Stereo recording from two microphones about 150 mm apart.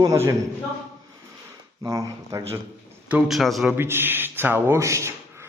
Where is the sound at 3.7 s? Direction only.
15° right (ahead or behind).